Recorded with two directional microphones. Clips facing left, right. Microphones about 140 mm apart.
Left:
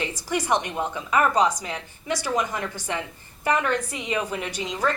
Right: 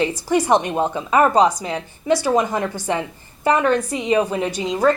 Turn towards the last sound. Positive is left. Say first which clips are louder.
# right 8 dB
turn(degrees=-35)  # may be behind; listen again after turning